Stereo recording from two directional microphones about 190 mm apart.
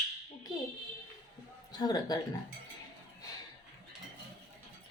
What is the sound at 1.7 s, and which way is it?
Speech, 20° left (ahead or behind).